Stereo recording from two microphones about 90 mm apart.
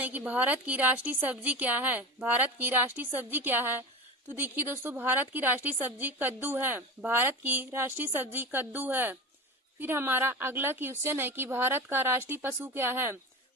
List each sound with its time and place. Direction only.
0.0 s a woman's voice: 20° right (ahead or behind)